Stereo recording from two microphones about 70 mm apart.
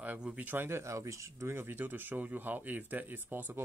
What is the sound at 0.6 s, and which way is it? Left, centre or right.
Speech, right.